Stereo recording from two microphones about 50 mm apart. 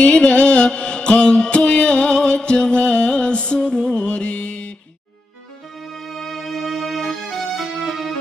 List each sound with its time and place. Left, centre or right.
0.0 s music: centre
5.9 s music: centre